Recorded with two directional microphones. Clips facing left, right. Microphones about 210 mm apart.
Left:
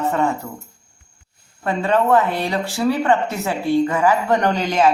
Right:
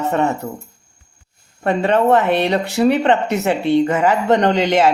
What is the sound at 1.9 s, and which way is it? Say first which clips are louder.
Speech: right 2 dB; 25° right (ahead or behind).